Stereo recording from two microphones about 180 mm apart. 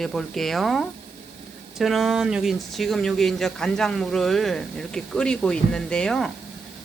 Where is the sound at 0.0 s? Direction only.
Centre (ahead or behind).